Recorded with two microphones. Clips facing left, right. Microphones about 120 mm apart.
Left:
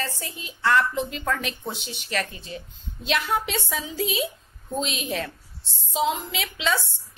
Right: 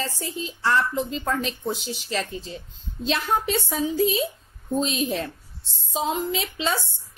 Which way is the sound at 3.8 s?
40° right (ahead or behind).